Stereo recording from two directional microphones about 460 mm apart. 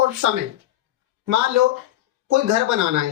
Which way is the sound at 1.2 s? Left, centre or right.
Right.